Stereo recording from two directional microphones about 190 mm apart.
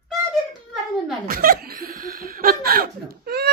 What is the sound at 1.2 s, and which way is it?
Speech, 50° right (ahead or behind).